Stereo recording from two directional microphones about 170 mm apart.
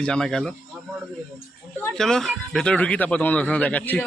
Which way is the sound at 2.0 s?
5° left (ahead or behind).